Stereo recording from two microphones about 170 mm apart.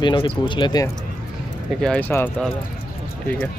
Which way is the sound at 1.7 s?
5° left (ahead or behind).